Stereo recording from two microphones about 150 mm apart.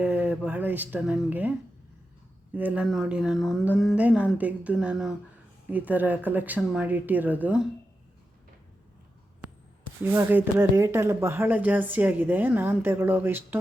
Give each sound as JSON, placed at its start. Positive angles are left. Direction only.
{"t": 0.0, "sound": "speech", "side_deg": -10}
{"t": 2.8, "sound": "speech", "side_deg": 0}
{"t": 9.8, "sound": "speech", "side_deg": -15}